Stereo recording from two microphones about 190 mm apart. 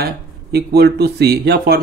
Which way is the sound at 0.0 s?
55° right (ahead or behind).